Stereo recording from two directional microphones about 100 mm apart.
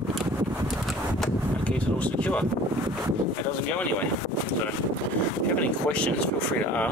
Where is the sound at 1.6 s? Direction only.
15° left (ahead or behind).